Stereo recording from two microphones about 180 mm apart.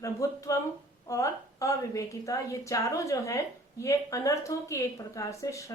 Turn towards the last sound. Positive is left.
turn(degrees=20)  # may be behind; listen again after turning